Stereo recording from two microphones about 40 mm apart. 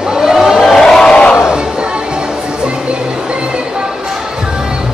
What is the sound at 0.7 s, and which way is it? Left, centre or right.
Crowd, centre.